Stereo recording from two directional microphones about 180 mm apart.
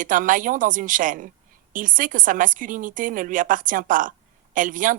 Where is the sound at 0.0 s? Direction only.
50° right (ahead or behind).